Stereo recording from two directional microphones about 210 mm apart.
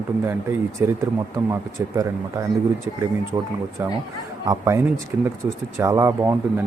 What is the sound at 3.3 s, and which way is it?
Speech, 15° right (ahead or behind).